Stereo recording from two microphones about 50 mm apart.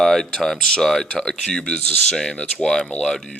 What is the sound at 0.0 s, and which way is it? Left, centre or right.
Speech, centre.